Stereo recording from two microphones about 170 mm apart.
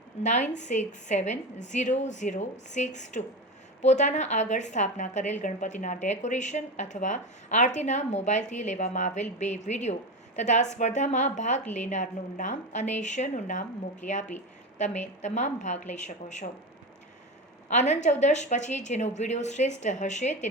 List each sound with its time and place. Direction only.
0.2 s a woman's voice: 45° left (ahead or behind)
14.8 s a woman's voice: 45° left (ahead or behind)
17.7 s a woman's voice: 45° left (ahead or behind)